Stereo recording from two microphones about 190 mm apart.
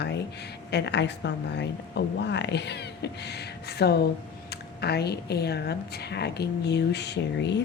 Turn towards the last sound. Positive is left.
turn(degrees=65)  # may be behind; listen again after turning